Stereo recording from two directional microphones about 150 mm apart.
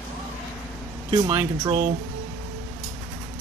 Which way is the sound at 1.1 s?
30° right (ahead or behind).